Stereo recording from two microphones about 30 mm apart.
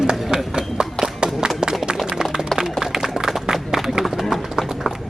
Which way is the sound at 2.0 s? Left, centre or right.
Centre.